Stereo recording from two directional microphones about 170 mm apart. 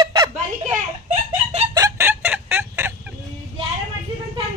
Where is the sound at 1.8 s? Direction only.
15° right (ahead or behind).